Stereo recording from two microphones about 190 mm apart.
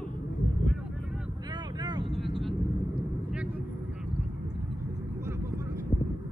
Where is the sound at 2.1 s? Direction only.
Centre (ahead or behind).